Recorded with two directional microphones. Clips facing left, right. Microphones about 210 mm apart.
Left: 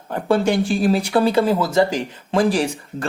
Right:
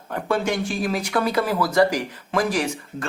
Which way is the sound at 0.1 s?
30° left (ahead or behind).